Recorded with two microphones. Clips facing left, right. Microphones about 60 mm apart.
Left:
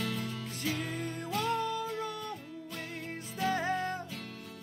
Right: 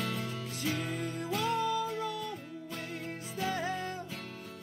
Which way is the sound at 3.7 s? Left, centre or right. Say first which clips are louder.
Left 3 dB; left.